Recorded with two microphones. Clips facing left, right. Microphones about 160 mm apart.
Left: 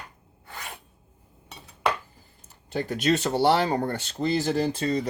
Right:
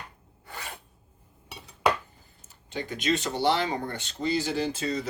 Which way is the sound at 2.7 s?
40° left (ahead or behind).